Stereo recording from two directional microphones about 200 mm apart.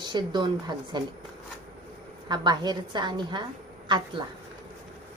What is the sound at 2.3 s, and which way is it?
Speech, 20° right (ahead or behind).